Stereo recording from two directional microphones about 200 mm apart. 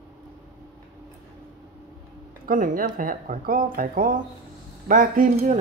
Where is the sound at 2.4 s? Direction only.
45° right (ahead or behind).